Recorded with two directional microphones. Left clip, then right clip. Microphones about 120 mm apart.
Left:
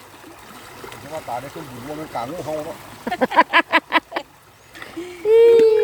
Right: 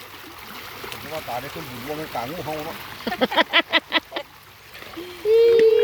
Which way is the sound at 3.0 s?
5° left (ahead or behind).